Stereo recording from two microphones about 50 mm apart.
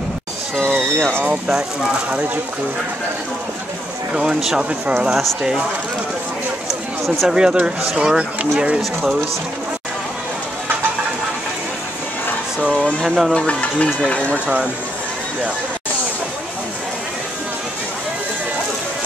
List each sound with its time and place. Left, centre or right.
1.2 s speech: right
2.0 s speech: right
4.1 s speech: centre
5.1 s speech: centre
7.2 s speech: centre
13.0 s speech: centre
13.3 s speech: left